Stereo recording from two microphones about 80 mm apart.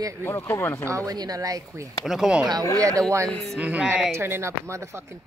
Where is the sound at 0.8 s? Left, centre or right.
Right.